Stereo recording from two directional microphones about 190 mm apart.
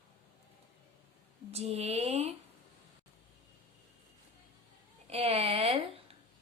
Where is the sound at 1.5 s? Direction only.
35° right (ahead or behind).